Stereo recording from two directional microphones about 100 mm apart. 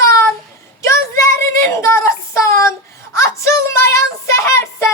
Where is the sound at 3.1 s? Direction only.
30° left (ahead or behind).